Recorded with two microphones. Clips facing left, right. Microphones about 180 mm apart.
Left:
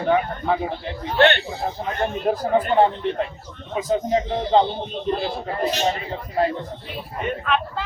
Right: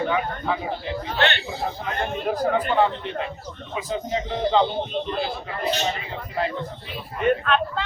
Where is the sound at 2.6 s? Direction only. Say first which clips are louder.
Left 3 dB; 40° left (ahead or behind).